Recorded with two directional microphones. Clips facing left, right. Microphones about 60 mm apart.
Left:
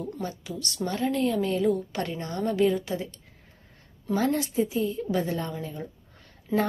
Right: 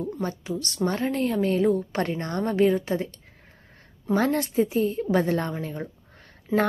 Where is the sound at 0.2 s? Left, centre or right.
Right.